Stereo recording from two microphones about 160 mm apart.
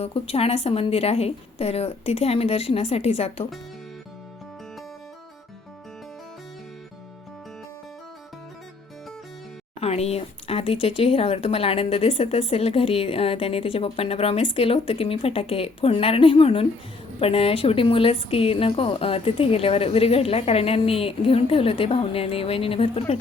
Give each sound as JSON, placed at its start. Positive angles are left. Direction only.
{"t": 0.0, "sound": "speech", "side_deg": 40}
{"t": 9.8, "sound": "speech", "side_deg": 40}